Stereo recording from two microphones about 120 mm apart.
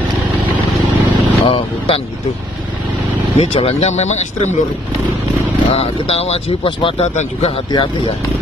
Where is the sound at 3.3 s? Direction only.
60° left (ahead or behind).